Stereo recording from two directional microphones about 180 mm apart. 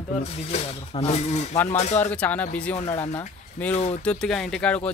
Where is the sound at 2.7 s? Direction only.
35° left (ahead or behind).